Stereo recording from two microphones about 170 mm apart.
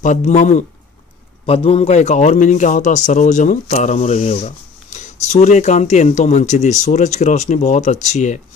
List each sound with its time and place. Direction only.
0.0 s speech: 45° left (ahead or behind)